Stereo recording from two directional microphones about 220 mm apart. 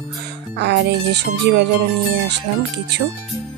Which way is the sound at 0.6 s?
50° right (ahead or behind).